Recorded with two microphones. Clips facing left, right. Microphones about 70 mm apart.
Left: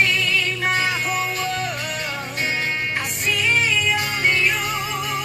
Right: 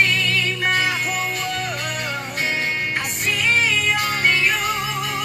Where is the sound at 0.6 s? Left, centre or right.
Centre.